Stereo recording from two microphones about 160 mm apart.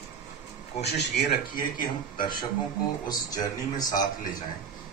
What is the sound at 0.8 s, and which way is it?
Speech, 90° left.